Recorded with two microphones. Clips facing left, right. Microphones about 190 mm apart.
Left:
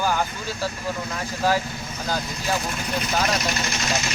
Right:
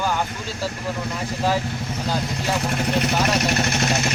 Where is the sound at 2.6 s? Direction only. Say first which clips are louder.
Right 5 dB; 65° right (ahead or behind).